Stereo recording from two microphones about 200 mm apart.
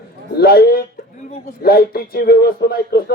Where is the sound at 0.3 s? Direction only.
50° left (ahead or behind).